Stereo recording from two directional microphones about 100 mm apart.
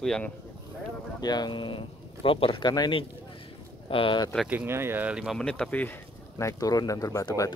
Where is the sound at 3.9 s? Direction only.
55° left (ahead or behind).